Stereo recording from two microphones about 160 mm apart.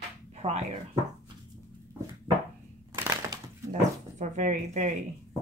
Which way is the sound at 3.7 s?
50° right (ahead or behind).